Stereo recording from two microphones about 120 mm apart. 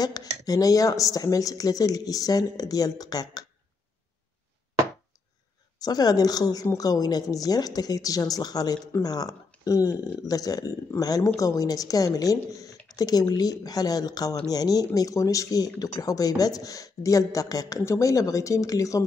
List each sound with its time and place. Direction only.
0.0 s speech: 30° left (ahead or behind)
5.8 s speech: 35° left (ahead or behind)